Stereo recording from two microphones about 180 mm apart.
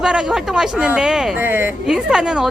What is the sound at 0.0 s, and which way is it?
Speech, 5° right (ahead or behind).